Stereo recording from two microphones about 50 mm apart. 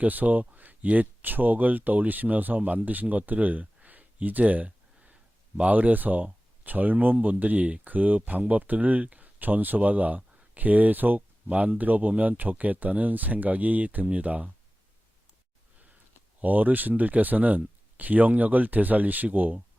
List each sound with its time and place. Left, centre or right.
0.0 s speech: right
3.8 s a sound: right
5.5 s speech: right
11.4 s speech: right
16.4 s speech: right